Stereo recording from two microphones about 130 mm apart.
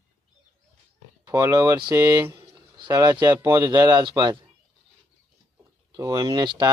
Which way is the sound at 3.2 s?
30° right (ahead or behind).